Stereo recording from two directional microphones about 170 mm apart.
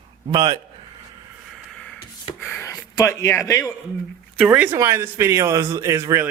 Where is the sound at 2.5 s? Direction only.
15° left (ahead or behind).